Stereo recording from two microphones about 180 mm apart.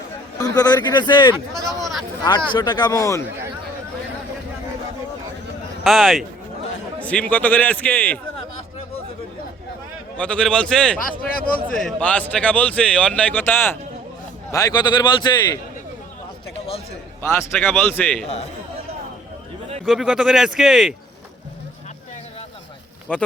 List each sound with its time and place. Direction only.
0.3 s a man's voice: 20° left (ahead or behind)
1.6 s a sound: centre (ahead or behind)
2.5 s a man's voice: 25° left (ahead or behind)
5.8 s a man's voice: centre (ahead or behind)
10.2 s speech: 5° left (ahead or behind)
11.3 s a man's voice: 55° left (ahead or behind)
11.7 s a man's voice: 5° left (ahead or behind)
14.5 s a man's voice: 20° left (ahead or behind)
17.6 s a man's voice: 10° left (ahead or behind)
19.8 s speech: centre (ahead or behind)
23.1 s a man's voice: 10° left (ahead or behind)